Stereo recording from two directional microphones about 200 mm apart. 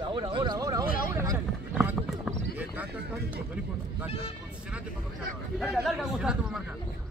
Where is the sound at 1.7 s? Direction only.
5° right (ahead or behind).